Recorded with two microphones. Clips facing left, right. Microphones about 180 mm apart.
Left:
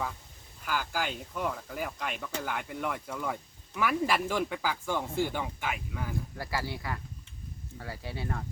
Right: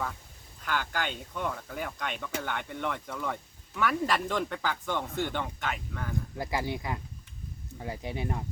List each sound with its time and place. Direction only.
0.6 s speech: 5° left (ahead or behind)
6.3 s speech: 20° right (ahead or behind)